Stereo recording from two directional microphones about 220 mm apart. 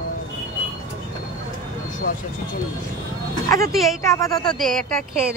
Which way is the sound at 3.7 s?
Centre (ahead or behind).